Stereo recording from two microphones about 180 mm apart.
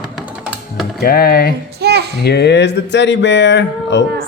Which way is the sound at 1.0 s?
55° left (ahead or behind).